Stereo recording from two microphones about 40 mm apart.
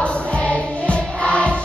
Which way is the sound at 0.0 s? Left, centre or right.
Left.